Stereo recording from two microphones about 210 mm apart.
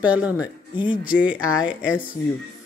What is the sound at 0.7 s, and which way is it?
Speech, 25° left (ahead or behind).